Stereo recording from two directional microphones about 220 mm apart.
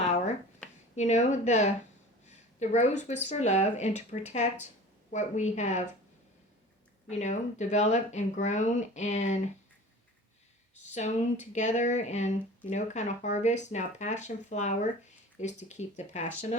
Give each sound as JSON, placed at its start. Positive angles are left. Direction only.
{"t": 0.0, "sound": "finger snapping", "side_deg": 30}
{"t": 0.9, "sound": "speech", "side_deg": 30}
{"t": 2.2, "sound": "a sound", "side_deg": 30}
{"t": 3.2, "sound": "speech", "side_deg": 30}
{"t": 7.1, "sound": "speech", "side_deg": 30}
{"t": 10.9, "sound": "speech", "side_deg": 30}